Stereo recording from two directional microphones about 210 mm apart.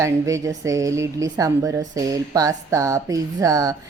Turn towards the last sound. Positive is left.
turn(degrees=-15)  # may be behind; listen again after turning